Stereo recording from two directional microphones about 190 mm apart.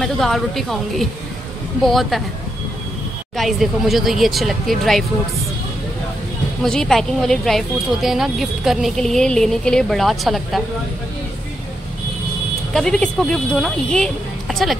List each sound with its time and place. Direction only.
0.0 s a woman's voice: centre (ahead or behind)
3.3 s a woman's voice: centre (ahead or behind)
6.6 s a woman's voice: centre (ahead or behind)
12.7 s a woman's voice: 5° left (ahead or behind)